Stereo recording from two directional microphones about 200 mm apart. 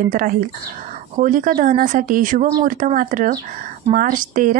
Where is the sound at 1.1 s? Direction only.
40° right (ahead or behind).